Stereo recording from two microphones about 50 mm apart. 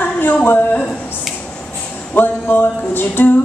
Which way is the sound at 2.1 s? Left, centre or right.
Left.